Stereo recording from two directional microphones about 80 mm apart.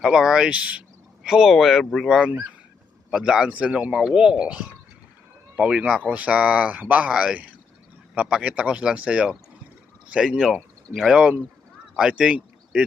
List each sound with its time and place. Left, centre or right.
0.0 s speech: centre
2.0 s speech: centre